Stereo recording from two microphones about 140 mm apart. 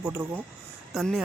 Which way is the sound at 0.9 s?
Centre (ahead or behind).